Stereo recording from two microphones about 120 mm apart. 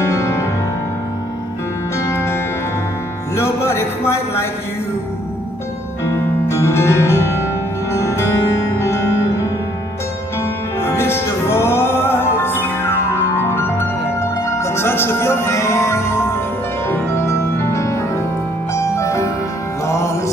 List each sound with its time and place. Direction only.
0.0 s music: 25° left (ahead or behind)
2.0 s music: 20° left (ahead or behind)
3.3 s speech: 20° left (ahead or behind)
6.0 s music: 20° left (ahead or behind)
10.8 s music: 20° left (ahead or behind)